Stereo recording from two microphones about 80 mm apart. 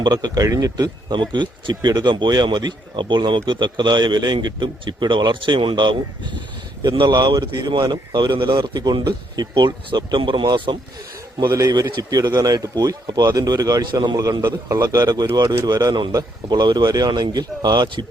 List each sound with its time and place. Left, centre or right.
0.0 s speech: right
1.1 s speech: right
6.8 s speech: right
11.7 s speech: right
14.8 s speech: right
16.1 s speech: right